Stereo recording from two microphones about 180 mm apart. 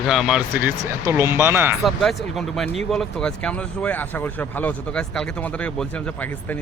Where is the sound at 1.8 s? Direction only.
Centre (ahead or behind).